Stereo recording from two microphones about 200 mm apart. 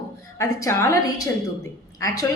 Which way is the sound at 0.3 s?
15° left (ahead or behind).